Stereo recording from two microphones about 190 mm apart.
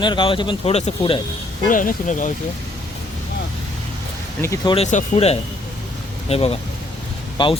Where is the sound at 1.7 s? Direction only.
45° left (ahead or behind).